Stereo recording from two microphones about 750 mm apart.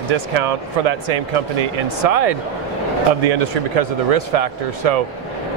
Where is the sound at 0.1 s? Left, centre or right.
Right.